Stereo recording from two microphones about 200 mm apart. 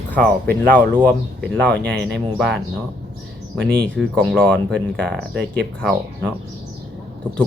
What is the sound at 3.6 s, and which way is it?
Speech, 5° left (ahead or behind).